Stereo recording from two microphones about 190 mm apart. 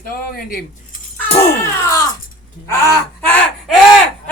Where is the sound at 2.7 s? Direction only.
15° left (ahead or behind).